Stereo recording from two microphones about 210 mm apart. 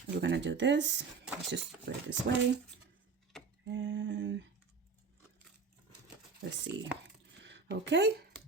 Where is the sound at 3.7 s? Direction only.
60° right (ahead or behind).